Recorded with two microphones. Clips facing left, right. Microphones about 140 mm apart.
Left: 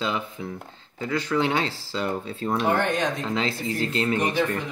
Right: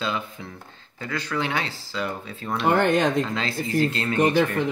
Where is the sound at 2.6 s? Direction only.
60° right (ahead or behind).